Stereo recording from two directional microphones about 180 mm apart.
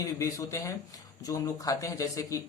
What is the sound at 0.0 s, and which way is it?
Speech, 20° left (ahead or behind).